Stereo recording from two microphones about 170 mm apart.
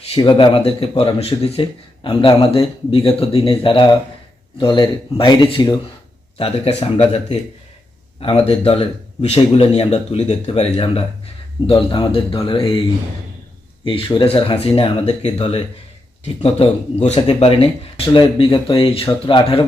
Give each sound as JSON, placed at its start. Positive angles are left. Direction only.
{"t": 0.1, "sound": "speech", "side_deg": 30}
{"t": 13.8, "sound": "speech", "side_deg": 30}